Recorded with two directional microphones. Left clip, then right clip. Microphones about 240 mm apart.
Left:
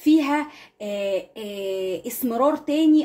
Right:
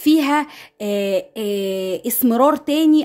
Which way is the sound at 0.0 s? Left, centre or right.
Right.